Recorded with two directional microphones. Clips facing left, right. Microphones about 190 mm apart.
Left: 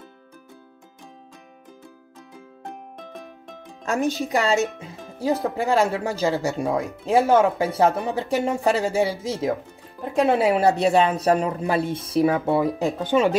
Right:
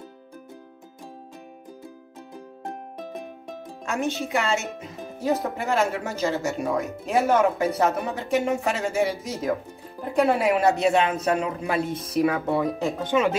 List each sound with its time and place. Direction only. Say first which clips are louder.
3.8 s speech: left 4 dB; 35° left (ahead or behind)